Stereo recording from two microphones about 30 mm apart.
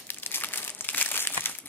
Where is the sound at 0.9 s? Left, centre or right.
Left.